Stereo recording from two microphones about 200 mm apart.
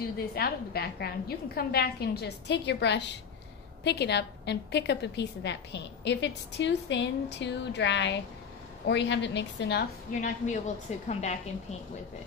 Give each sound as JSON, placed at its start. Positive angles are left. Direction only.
{"t": 0.3, "sound": "a woman's voice", "side_deg": 50}
{"t": 10.2, "sound": "a woman's voice", "side_deg": 40}